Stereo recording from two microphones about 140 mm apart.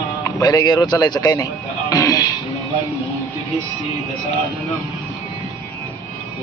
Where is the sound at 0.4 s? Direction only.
30° left (ahead or behind).